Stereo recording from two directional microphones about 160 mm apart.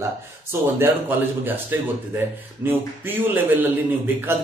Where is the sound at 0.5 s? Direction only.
15° right (ahead or behind).